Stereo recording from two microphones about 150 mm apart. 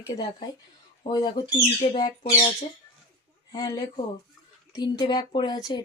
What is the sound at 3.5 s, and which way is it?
Speech, 25° left (ahead or behind).